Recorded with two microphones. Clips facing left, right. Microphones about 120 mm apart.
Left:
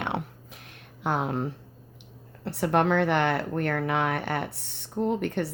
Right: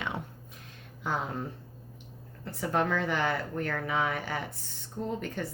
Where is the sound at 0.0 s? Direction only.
80° left.